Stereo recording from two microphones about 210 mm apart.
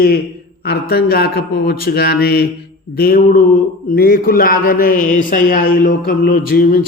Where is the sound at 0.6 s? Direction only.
50° left (ahead or behind).